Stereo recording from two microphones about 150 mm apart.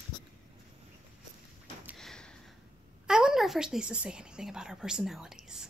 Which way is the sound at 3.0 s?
5° right (ahead or behind).